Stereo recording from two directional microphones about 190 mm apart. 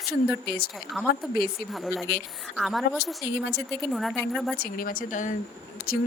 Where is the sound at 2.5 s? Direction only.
Centre (ahead or behind).